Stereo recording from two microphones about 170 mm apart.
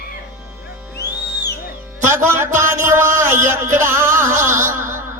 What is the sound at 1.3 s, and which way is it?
Music, 75° left (ahead or behind).